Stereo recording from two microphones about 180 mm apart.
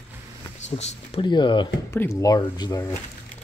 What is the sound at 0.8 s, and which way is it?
Speech, 35° left (ahead or behind).